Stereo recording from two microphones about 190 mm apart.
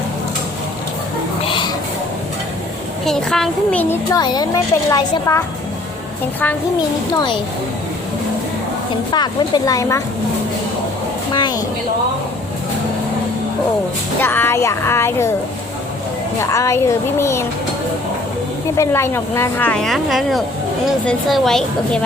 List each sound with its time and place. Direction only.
1.5 s a sound: 25° left (ahead or behind)
3.0 s a woman's voice: centre (ahead or behind)
4.1 s a woman's voice: 20° left (ahead or behind)
9.1 s a woman's voice: 20° left (ahead or behind)
11.3 s a woman's voice: 20° left (ahead or behind)
14.2 s a woman's voice: 10° left (ahead or behind)
16.4 s a woman's voice: 15° left (ahead or behind)
18.8 s a woman's voice: 15° left (ahead or behind)